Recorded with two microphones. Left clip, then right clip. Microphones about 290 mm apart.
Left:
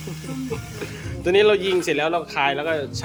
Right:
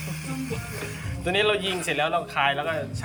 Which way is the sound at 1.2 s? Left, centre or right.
Centre.